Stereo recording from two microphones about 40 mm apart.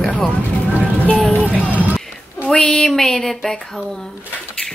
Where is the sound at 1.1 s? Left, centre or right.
Left.